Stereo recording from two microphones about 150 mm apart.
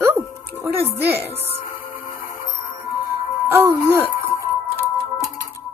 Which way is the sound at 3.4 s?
15° right (ahead or behind).